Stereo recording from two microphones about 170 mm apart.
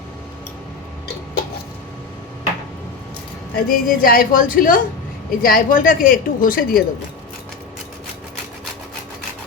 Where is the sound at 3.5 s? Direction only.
55° left (ahead or behind).